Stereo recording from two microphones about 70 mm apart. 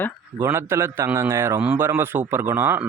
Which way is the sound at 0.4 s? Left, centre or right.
Right.